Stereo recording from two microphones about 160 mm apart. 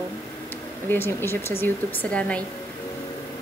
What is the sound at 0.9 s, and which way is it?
A woman's voice, 15° left (ahead or behind).